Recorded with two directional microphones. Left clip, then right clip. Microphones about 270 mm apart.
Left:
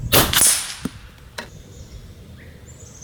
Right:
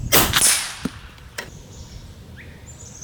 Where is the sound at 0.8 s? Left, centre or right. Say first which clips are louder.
Right 1 dB; centre.